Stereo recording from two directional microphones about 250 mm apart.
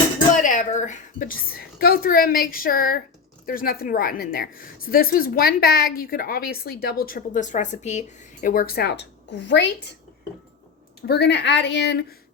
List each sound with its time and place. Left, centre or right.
0.4 s a woman's voice: left
11.0 s speech: left